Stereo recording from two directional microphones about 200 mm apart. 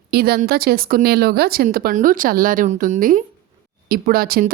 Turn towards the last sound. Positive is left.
turn(degrees=-50)  # may be behind; listen again after turning